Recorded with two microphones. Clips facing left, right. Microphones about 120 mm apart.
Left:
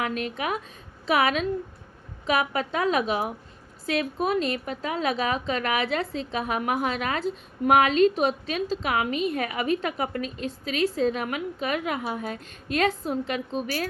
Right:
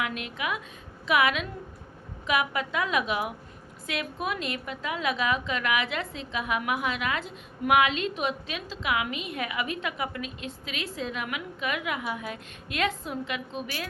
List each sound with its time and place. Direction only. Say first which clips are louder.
0.0 s a woman's voice: left 4 dB; 40° left (ahead or behind)